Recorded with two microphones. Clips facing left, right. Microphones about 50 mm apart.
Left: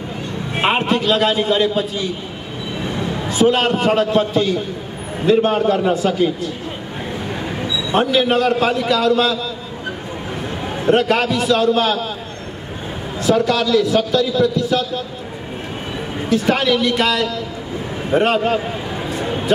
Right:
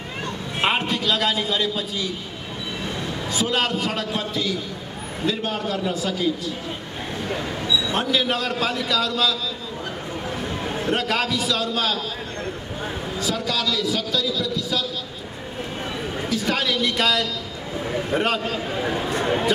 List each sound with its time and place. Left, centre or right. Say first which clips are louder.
0.6 s a man's voice: left 5 dB; left
0.8 s a man's voice: left 6 dB; left
3.4 s a man's voice: left 9 dB; left
7.6 s a sound: left 6 dB; left
8.4 s a man's voice: left 8 dB; left
11.0 s a man's voice: left 7 dB; left
13.2 s a man's voice: left 10 dB; left
16.3 s a man's voice: left 8 dB; left
16.9 s a man's voice: left 4 dB; left
18.2 s a man's voice: left 7 dB; left